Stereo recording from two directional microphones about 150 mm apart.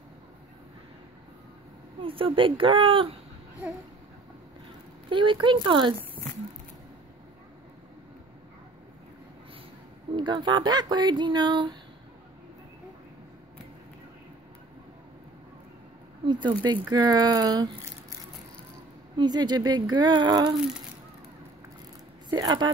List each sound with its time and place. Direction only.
2.0 s speech: 35° right (ahead or behind)
5.1 s speech: 35° right (ahead or behind)
10.1 s speech: 30° right (ahead or behind)
16.3 s speech: 30° right (ahead or behind)
19.1 s speech: 30° right (ahead or behind)
22.3 s speech: 30° right (ahead or behind)